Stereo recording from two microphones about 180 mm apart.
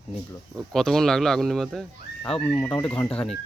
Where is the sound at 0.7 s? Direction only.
Centre (ahead or behind).